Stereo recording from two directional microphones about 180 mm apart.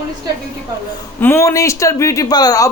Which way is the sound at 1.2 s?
15° left (ahead or behind).